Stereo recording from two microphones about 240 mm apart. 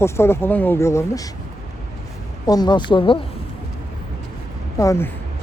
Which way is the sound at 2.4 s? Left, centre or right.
Centre.